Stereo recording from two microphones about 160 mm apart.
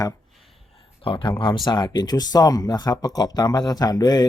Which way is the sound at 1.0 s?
35° left (ahead or behind).